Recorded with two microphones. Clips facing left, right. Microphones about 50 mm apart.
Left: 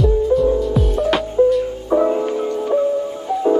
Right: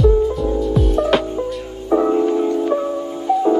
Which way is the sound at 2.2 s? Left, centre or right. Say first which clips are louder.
Right 3 dB; right.